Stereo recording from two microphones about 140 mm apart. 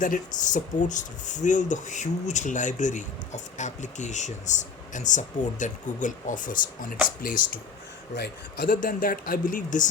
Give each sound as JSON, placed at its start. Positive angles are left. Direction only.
{"t": 0.0, "sound": "speech", "side_deg": 65}
{"t": 8.6, "sound": "speech", "side_deg": 75}